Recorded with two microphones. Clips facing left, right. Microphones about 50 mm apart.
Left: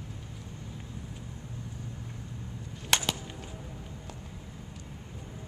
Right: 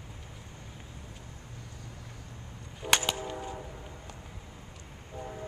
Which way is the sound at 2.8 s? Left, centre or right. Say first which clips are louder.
Right 1 dB; centre.